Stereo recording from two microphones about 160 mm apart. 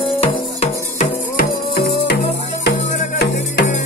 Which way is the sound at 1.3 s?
65° left (ahead or behind).